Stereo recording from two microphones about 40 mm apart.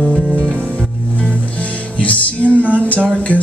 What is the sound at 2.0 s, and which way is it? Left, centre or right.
Music, left.